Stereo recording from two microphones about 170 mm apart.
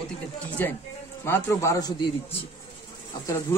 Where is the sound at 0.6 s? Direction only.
10° left (ahead or behind).